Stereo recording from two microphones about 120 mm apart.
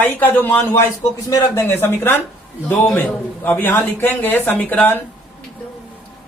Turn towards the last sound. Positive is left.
turn(degrees=15)  # may be behind; listen again after turning